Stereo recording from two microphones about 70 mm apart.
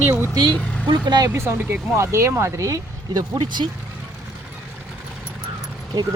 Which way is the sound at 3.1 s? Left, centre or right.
Right.